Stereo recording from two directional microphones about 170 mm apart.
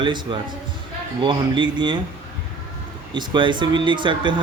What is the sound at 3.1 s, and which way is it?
Speech, 25° right (ahead or behind).